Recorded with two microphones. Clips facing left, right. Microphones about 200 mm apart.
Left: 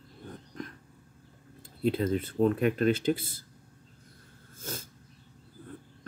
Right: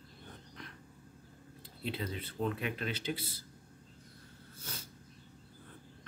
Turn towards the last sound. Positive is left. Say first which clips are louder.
# left 8 dB
turn(degrees=45)  # may be behind; listen again after turning